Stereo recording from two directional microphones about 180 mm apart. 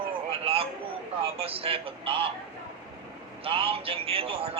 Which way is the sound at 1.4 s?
30° right (ahead or behind).